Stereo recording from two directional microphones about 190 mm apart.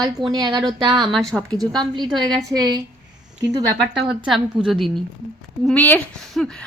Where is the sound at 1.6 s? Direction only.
20° right (ahead or behind).